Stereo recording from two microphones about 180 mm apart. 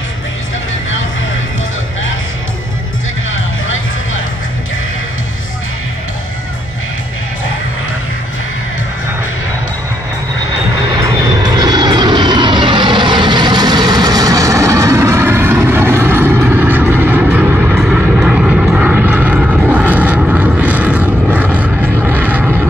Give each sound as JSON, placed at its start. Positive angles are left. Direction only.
{"t": 3.6, "sound": "music", "side_deg": 90}
{"t": 11.0, "sound": "vehicle", "side_deg": -20}